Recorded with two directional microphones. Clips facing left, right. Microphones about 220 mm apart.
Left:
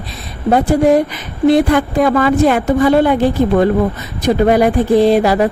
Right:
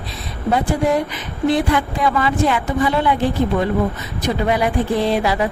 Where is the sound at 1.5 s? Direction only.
45° left (ahead or behind).